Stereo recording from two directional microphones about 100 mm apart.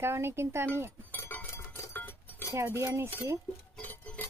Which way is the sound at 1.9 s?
20° left (ahead or behind).